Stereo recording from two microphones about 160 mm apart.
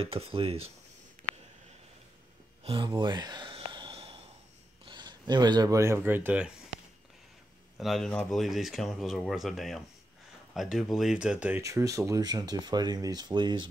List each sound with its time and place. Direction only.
0.0 s speech: 35° right (ahead or behind)
2.6 s a sound: 30° right (ahead or behind)
4.8 s speech: 30° right (ahead or behind); by 6.5 s 10° right (ahead or behind)
7.7 s speech: centre (ahead or behind)
11.6 s speech: 20° right (ahead or behind)